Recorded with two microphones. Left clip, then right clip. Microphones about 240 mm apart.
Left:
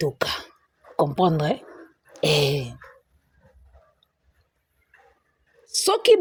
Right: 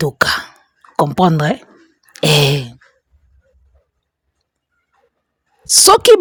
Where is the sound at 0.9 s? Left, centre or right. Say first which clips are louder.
Right 7 dB; right.